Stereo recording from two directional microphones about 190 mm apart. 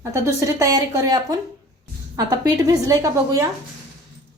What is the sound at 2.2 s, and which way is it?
A woman's voice, 20° right (ahead or behind).